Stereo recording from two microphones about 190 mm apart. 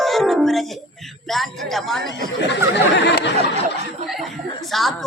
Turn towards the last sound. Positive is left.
turn(degrees=0)  # may be behind; listen again after turning